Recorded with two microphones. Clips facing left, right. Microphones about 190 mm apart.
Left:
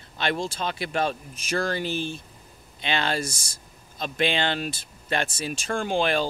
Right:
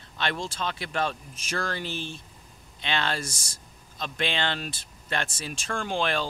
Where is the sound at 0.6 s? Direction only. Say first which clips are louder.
Left 2 dB; 10° left (ahead or behind).